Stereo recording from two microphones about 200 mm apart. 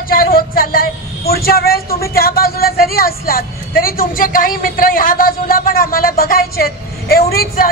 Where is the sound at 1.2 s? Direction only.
50° left (ahead or behind).